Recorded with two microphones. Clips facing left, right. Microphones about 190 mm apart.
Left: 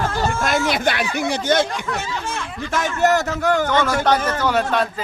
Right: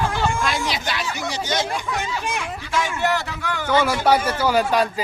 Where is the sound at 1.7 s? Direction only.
10° right (ahead or behind).